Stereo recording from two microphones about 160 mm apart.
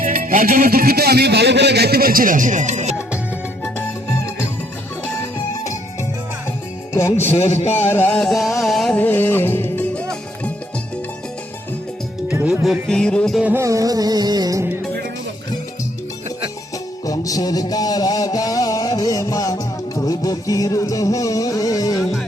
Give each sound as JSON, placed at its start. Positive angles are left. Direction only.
{"t": 0.0, "sound": "music", "side_deg": -60}
{"t": 6.9, "sound": "speech", "side_deg": 15}
{"t": 7.3, "sound": "speech", "side_deg": 45}
{"t": 7.9, "sound": "music", "side_deg": 10}
{"t": 12.9, "sound": "music", "side_deg": 5}
{"t": 13.4, "sound": "music", "side_deg": -15}
{"t": 17.1, "sound": "a sound", "side_deg": 20}